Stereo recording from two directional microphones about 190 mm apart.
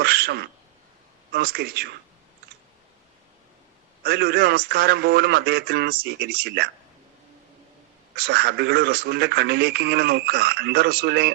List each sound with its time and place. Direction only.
0.0 s speech: 55° right (ahead or behind)
4.0 s speech: 55° right (ahead or behind)
8.1 s speech: 55° right (ahead or behind)